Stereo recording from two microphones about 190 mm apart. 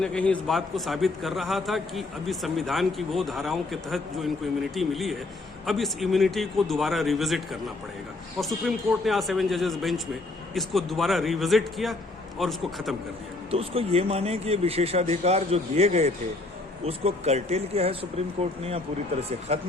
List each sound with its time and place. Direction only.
0.0 s a man's voice: 5° left (ahead or behind)
13.5 s speech: 30° right (ahead or behind)